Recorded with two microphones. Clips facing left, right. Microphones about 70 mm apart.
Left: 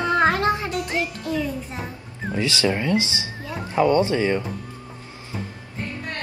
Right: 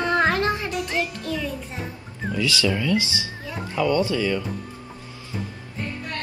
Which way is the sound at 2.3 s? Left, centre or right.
Left.